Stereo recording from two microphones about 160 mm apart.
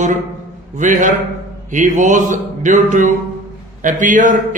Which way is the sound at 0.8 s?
50° right (ahead or behind).